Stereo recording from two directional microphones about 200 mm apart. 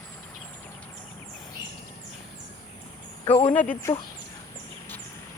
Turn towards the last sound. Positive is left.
turn(degrees=10)  # may be behind; listen again after turning